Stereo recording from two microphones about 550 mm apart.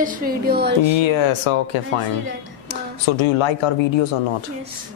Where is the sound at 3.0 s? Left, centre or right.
Left.